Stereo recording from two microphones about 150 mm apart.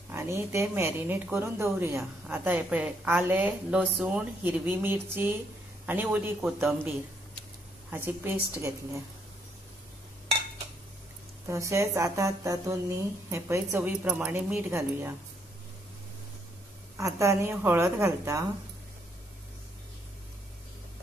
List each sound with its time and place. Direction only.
0.1 s a woman's voice: 15° right (ahead or behind)
7.9 s a woman's voice: 15° right (ahead or behind)
11.4 s speech: 20° right (ahead or behind)
16.9 s speech: 20° right (ahead or behind)